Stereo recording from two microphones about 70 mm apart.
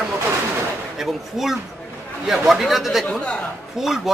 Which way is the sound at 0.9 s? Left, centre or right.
Centre.